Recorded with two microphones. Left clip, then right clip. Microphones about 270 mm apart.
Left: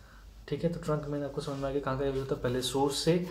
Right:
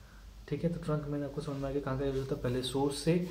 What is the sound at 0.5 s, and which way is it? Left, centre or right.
Speech, centre.